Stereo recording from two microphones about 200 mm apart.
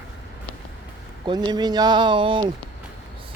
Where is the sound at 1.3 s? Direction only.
20° right (ahead or behind).